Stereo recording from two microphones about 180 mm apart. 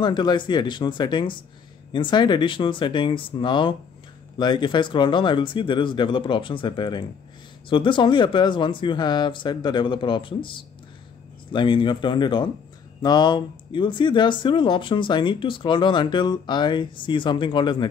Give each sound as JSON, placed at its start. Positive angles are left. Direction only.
{"t": 0.0, "sound": "speech", "side_deg": 25}